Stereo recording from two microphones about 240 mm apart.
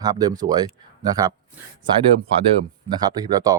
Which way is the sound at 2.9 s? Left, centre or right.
Centre.